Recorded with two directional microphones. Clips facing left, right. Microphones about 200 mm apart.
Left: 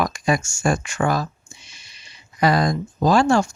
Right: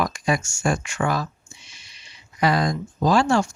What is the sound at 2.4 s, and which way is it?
Speech, 40° left (ahead or behind).